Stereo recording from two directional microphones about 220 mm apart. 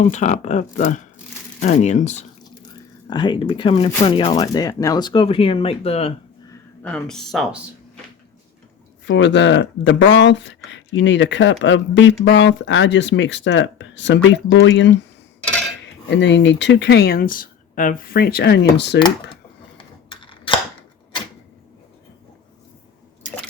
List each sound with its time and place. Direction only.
0.0 s speech: 35° left (ahead or behind)
3.1 s speech: 20° left (ahead or behind)
6.8 s speech: 5° left (ahead or behind)
9.0 s speech: 55° left (ahead or behind)
16.0 s speech: 55° left (ahead or behind)
19.7 s a sound: 25° left (ahead or behind)